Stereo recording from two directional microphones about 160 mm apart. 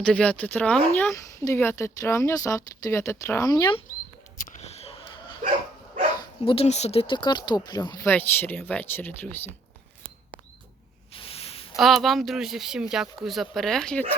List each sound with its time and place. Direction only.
0.0 s speech: 5° left (ahead or behind); by 3.8 s 30° left (ahead or behind)
4.4 s a sound: 50° left (ahead or behind)
6.4 s speech: 35° left (ahead or behind)
8.0 s speech: 10° left (ahead or behind)
11.1 s a sound: 35° left (ahead or behind)
11.8 s speech: centre (ahead or behind)